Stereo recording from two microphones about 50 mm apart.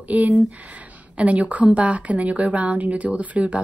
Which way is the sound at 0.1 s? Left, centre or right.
Right.